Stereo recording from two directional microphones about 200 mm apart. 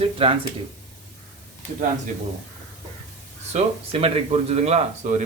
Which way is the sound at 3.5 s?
30° right (ahead or behind).